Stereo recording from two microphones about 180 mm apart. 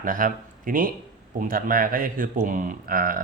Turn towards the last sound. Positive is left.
turn(degrees=-50)  # may be behind; listen again after turning